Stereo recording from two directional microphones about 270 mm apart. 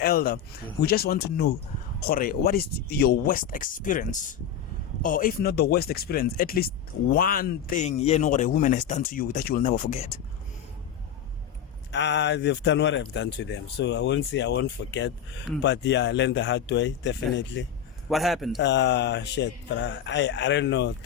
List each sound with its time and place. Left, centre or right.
0.0 s speech: left
11.9 s speech: left
18.1 s a man's voice: centre
18.6 s speech: left